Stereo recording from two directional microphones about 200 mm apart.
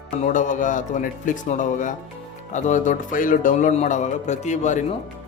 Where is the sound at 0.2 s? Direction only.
40° left (ahead or behind).